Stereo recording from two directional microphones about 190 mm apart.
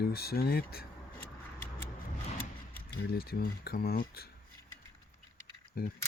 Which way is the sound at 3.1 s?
55° left (ahead or behind).